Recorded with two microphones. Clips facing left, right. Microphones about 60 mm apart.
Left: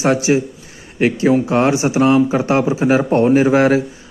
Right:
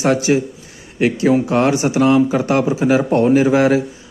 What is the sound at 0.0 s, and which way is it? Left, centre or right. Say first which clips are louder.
Speech: even; left.